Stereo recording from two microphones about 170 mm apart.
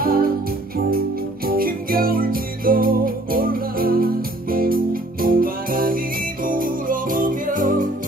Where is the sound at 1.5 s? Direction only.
60° right (ahead or behind).